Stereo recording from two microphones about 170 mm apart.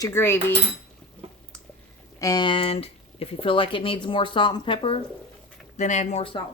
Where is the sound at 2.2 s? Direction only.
20° left (ahead or behind).